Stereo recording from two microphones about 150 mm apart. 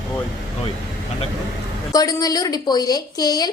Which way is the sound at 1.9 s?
25° left (ahead or behind).